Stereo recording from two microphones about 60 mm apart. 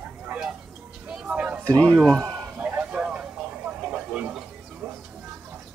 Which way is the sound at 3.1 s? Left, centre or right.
Right.